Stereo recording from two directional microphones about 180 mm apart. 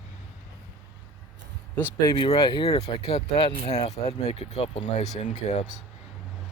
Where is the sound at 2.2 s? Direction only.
25° left (ahead or behind).